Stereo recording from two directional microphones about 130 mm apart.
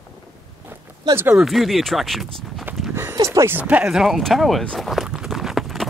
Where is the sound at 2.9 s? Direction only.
20° right (ahead or behind).